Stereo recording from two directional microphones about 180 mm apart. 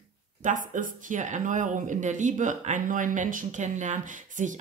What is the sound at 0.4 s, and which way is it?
Speech, 45° right (ahead or behind).